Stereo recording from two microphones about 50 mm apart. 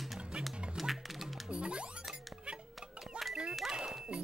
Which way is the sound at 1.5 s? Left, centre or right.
Right.